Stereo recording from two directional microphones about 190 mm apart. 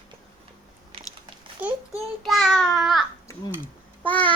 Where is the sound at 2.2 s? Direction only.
Centre (ahead or behind).